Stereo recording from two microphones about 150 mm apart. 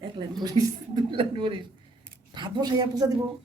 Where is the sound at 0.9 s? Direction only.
35° right (ahead or behind).